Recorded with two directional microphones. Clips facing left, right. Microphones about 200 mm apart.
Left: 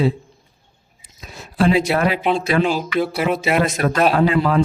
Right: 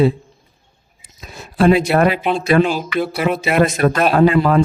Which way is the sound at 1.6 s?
55° right (ahead or behind).